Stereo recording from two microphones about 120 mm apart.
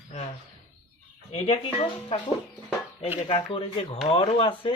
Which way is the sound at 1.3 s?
65° left (ahead or behind).